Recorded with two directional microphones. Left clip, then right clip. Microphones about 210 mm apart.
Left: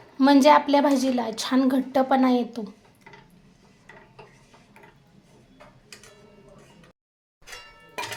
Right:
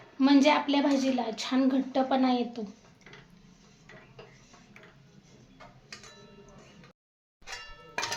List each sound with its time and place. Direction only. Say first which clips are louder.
0.2 s a woman's voice: left 7 dB; 35° left (ahead or behind)